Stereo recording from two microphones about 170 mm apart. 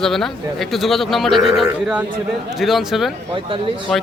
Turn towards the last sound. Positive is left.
turn(degrees=0)  # may be behind; listen again after turning